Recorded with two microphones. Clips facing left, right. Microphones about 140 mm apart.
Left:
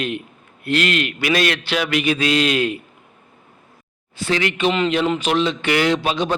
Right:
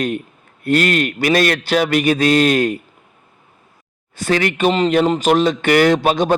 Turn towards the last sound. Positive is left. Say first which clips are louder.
# right 5 dB
turn(degrees=-50)  # may be behind; listen again after turning